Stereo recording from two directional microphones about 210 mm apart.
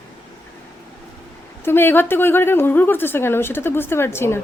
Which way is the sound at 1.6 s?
10° left (ahead or behind).